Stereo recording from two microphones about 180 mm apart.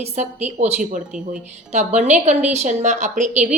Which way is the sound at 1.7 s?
40° right (ahead or behind).